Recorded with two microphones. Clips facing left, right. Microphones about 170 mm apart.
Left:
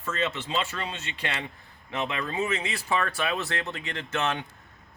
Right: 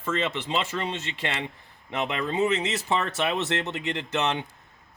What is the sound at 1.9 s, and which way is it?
Speech, 20° right (ahead or behind).